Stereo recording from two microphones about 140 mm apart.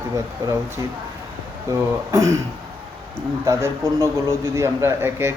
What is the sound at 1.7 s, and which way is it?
A man's voice, 20° right (ahead or behind).